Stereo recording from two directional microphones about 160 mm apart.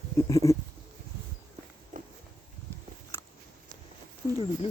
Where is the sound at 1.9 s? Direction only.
55° right (ahead or behind).